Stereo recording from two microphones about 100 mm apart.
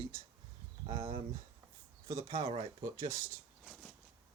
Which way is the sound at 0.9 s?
70° right (ahead or behind).